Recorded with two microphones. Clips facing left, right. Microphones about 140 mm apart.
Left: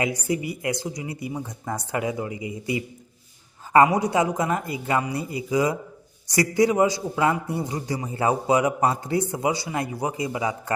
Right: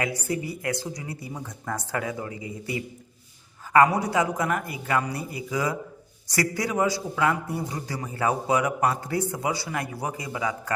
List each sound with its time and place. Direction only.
0.0 s speech: 15° left (ahead or behind)
3.8 s a man's voice: 20° left (ahead or behind)